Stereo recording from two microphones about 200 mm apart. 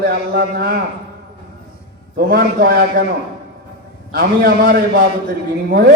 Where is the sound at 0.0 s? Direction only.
50° right (ahead or behind).